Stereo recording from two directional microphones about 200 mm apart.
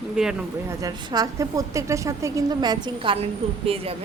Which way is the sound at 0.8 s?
20° right (ahead or behind).